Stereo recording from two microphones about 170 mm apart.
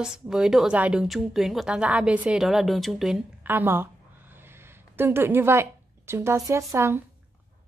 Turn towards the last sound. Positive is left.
turn(degrees=-15)  # may be behind; listen again after turning